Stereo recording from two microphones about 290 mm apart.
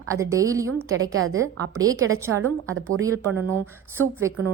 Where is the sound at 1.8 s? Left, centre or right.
Centre.